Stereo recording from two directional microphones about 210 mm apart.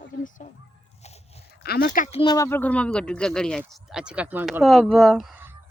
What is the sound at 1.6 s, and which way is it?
Speech, 50° left (ahead or behind).